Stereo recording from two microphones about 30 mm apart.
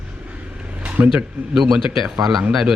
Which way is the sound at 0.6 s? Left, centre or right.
Right.